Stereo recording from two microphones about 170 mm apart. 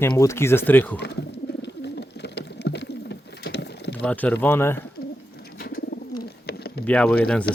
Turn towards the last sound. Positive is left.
turn(degrees=10)  # may be behind; listen again after turning